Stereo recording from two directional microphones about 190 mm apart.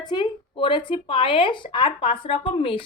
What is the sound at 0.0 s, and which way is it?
A woman's voice, 20° left (ahead or behind).